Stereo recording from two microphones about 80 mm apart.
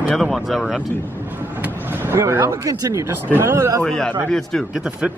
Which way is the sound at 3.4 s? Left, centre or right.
Right.